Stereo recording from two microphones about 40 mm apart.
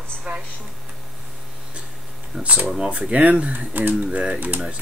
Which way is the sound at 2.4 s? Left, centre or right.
Right.